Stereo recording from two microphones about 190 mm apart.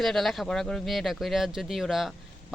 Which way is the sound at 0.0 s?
Centre (ahead or behind).